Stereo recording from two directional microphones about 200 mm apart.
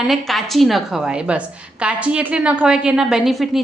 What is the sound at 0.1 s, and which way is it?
A woman's voice, centre (ahead or behind).